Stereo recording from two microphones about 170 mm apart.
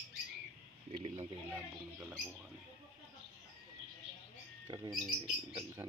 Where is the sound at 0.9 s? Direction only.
40° right (ahead or behind).